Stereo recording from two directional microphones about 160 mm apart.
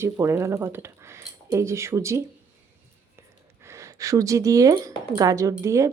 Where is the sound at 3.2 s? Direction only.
15° right (ahead or behind).